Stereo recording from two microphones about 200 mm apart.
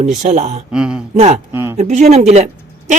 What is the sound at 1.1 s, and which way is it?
Speech, 35° right (ahead or behind).